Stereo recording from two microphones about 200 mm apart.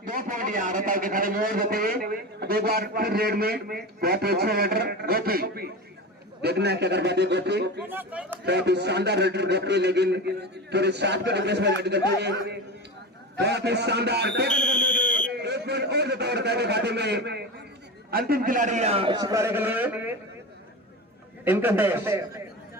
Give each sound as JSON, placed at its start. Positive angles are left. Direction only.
{"t": 0.1, "sound": "a man's voice", "side_deg": -45}
{"t": 7.9, "sound": "a man's voice", "side_deg": -10}
{"t": 8.4, "sound": "a man's voice", "side_deg": -55}
{"t": 21.4, "sound": "a man's voice", "side_deg": -10}